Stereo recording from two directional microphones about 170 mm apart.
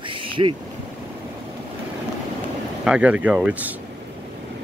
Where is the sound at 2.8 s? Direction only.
5° right (ahead or behind).